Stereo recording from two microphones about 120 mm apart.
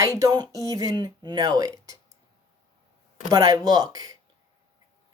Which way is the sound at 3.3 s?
30° right (ahead or behind).